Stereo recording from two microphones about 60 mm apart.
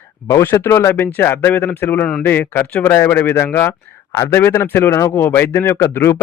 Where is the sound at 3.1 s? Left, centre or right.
Left.